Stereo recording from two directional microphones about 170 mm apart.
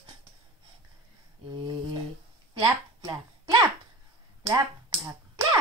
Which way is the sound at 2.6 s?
20° right (ahead or behind).